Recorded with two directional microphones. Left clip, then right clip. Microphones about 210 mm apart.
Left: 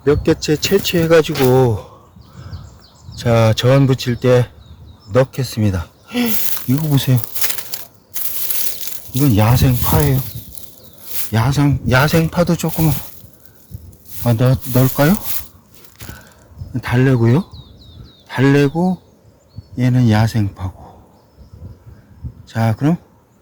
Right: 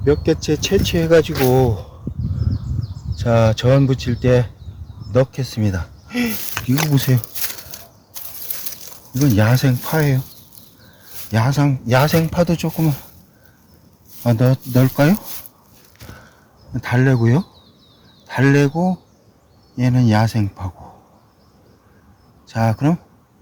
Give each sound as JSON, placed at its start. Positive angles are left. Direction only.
{"t": 0.0, "sound": "speech", "side_deg": 15}
{"t": 3.2, "sound": "speech", "side_deg": 25}
{"t": 9.2, "sound": "a man's voice", "side_deg": 5}
{"t": 11.3, "sound": "speech", "side_deg": 5}
{"t": 14.3, "sound": "speech", "side_deg": 10}
{"t": 16.0, "sound": "a sound", "side_deg": 35}
{"t": 16.7, "sound": "a man's voice", "side_deg": 5}
{"t": 18.3, "sound": "a man's voice", "side_deg": 0}
{"t": 22.4, "sound": "speech", "side_deg": 5}